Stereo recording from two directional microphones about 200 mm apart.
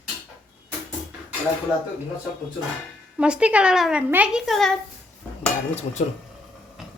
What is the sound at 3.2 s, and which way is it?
Child singing, 5° right (ahead or behind).